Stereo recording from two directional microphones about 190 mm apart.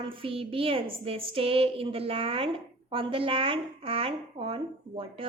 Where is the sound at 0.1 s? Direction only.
30° right (ahead or behind).